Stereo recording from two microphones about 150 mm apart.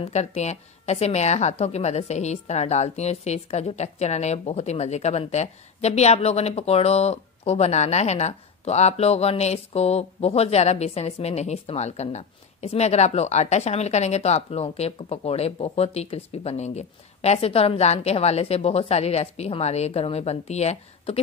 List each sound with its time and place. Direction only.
0.0 s a woman's voice: 45° left (ahead or behind)